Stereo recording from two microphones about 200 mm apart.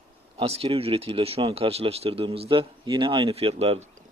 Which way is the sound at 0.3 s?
30° right (ahead or behind).